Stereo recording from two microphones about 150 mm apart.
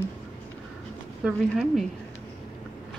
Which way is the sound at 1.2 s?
5° right (ahead or behind).